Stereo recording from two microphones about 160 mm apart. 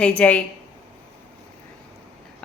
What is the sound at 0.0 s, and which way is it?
Speech, 10° left (ahead or behind).